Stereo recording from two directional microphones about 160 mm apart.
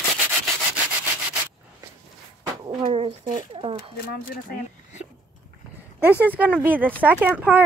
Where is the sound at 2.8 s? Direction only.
35° right (ahead or behind).